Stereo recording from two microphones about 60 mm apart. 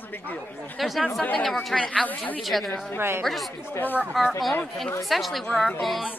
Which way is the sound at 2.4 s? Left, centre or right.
Centre.